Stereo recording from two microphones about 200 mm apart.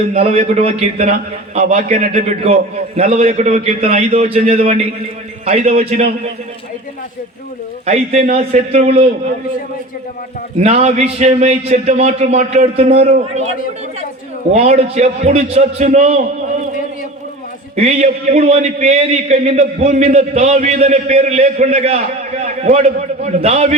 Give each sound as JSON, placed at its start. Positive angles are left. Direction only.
{"t": 0.1, "sound": "a man's voice", "side_deg": -30}
{"t": 7.9, "sound": "a man's voice", "side_deg": -35}
{"t": 10.6, "sound": "a man's voice", "side_deg": -35}
{"t": 17.7, "sound": "a man's voice", "side_deg": -35}